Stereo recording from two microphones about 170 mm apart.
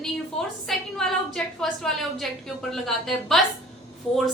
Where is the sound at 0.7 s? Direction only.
5° left (ahead or behind).